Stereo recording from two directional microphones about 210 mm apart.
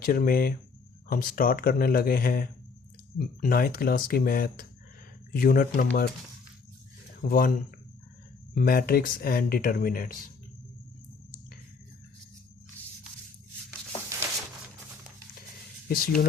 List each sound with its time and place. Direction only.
0.0 s speech: 45° left (ahead or behind)
7.2 s speech: 40° left (ahead or behind)
8.5 s speech: 45° left (ahead or behind)
15.9 s speech: 40° left (ahead or behind)